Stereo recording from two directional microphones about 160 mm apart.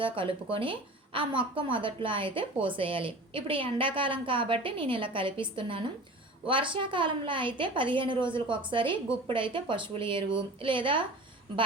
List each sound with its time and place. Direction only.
0.0 s a woman's voice: 35° right (ahead or behind)